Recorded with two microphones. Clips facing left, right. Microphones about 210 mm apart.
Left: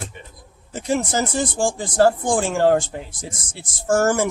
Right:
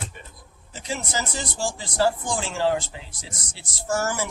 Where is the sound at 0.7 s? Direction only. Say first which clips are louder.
Left 9 dB; 50° left (ahead or behind).